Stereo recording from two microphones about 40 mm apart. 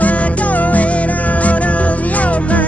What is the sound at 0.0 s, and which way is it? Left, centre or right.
Music, left.